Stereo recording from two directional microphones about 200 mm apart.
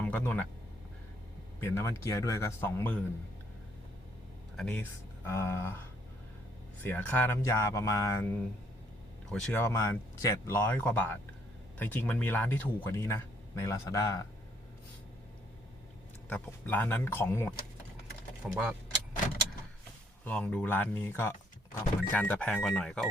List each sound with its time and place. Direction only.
0.0 s speech: 5° left (ahead or behind)
1.6 s speech: 10° left (ahead or behind)
4.5 s speech: 5° left (ahead or behind)
6.8 s speech: 10° left (ahead or behind)
9.3 s speech: 5° left (ahead or behind)
16.3 s speech: 10° left (ahead or behind)
18.4 s speech: 5° right (ahead or behind)
20.2 s speech: 5° left (ahead or behind)